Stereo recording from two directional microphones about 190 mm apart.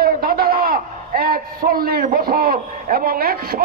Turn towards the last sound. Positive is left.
turn(degrees=-50)  # may be behind; listen again after turning